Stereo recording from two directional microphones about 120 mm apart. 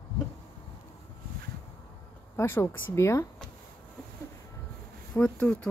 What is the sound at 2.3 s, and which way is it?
Speech, 20° left (ahead or behind).